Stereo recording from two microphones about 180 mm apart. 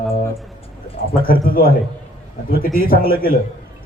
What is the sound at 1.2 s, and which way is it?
A man's voice, 55° left (ahead or behind).